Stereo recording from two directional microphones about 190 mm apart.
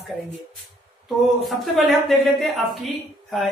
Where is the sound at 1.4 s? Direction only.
Centre (ahead or behind).